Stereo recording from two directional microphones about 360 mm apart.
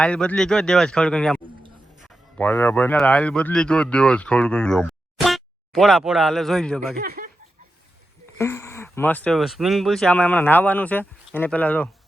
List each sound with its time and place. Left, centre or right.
0.0 s speech: centre
2.4 s speech: centre
7.0 s speech: right
8.4 s speech: centre